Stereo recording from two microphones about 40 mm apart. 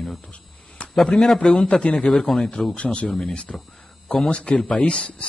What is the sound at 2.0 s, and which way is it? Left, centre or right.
Speech, left.